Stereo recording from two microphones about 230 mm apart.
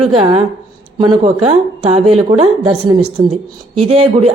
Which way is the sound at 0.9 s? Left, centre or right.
Right.